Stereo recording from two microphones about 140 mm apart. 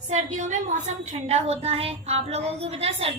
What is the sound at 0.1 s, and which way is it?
A woman's voice, 55° right (ahead or behind).